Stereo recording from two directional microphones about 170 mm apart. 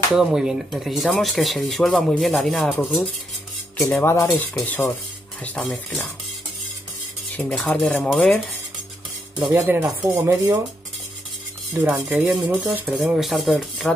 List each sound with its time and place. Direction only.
0.1 s speech: 5° right (ahead or behind)
3.8 s speech: 15° left (ahead or behind)
7.3 s speech: 10° left (ahead or behind)
9.4 s speech: 10° right (ahead or behind)
11.7 s speech: 10° right (ahead or behind)